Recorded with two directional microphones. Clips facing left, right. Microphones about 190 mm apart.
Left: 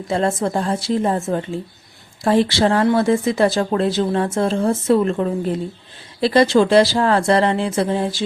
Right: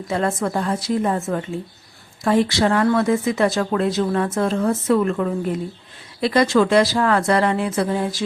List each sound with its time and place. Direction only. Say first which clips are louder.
0.1 s speech: left 2 dB; 30° left (ahead or behind)